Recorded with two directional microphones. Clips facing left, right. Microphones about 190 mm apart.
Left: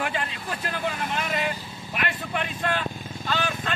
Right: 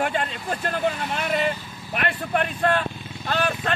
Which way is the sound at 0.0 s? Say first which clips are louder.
Right 4 dB; 45° right (ahead or behind).